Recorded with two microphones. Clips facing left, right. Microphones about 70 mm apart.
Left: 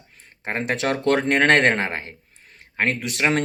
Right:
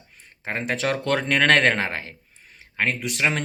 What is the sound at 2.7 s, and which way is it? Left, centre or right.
Speech, left.